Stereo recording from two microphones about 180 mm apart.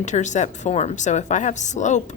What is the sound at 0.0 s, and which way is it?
A woman's voice, 40° left (ahead or behind).